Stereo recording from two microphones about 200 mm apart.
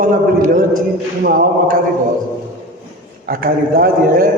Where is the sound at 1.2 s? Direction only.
45° right (ahead or behind).